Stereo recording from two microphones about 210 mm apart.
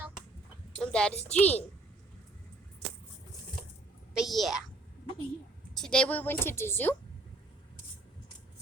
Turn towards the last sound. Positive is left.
turn(degrees=10)  # may be behind; listen again after turning